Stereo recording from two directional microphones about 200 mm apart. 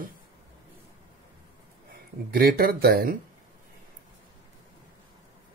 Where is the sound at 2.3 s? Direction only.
50° right (ahead or behind).